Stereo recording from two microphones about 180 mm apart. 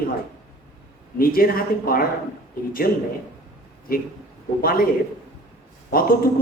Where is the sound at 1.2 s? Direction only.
55° left (ahead or behind).